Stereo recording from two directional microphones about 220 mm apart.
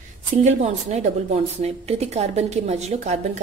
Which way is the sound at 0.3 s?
30° right (ahead or behind).